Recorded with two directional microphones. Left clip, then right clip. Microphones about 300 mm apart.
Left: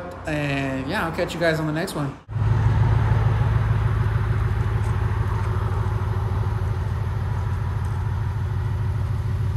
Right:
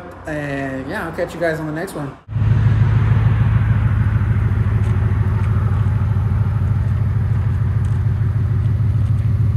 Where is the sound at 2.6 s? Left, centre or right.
Left.